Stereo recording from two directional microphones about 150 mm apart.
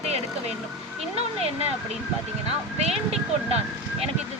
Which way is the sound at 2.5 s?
45° right (ahead or behind).